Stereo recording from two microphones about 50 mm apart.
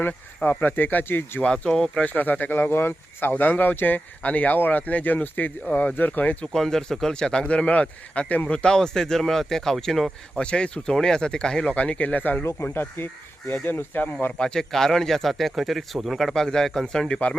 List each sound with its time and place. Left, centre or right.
0.4 s speech: left
1.4 s speech: left
2.0 s speech: left
6.5 s speech: centre; by 8.4 s left
8.5 s speech: centre
10.3 s speech: centre
11.7 s speech: left
12.4 s speech: left
14.3 s speech: centre